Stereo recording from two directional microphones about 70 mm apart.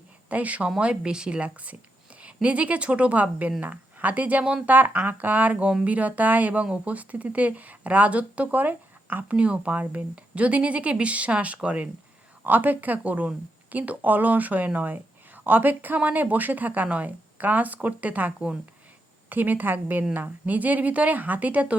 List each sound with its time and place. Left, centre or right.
0.3 s speech: right